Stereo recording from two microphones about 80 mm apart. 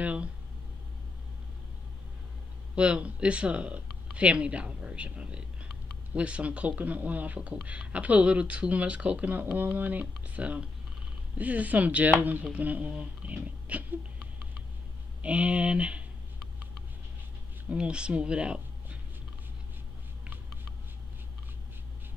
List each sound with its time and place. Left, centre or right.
0.0 s a sound: centre
2.7 s speech: centre
15.2 s speech: centre
17.6 s speech: centre